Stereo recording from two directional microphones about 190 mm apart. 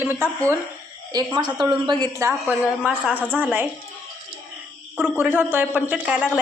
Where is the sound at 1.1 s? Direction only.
25° right (ahead or behind); by 3.6 s 5° right (ahead or behind).